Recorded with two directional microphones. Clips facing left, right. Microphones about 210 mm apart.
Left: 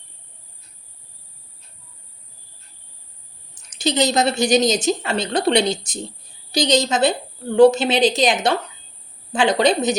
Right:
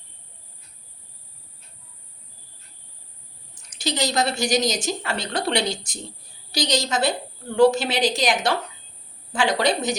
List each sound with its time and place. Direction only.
3.5 s a woman's voice: 20° left (ahead or behind)